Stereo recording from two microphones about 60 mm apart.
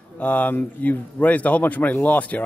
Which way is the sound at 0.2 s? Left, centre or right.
Left.